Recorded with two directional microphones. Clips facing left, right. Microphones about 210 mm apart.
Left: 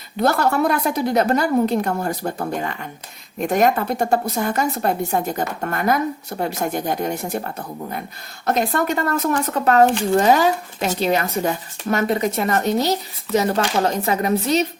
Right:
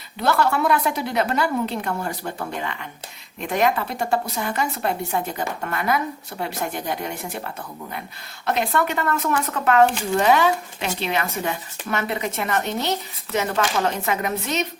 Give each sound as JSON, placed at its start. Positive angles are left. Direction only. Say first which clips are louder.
{"t": 0.2, "sound": "a woman's voice", "louder": "left 3 dB", "side_deg": 45}